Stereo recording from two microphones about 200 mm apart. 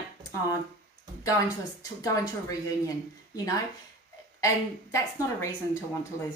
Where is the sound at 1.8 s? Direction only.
15° left (ahead or behind).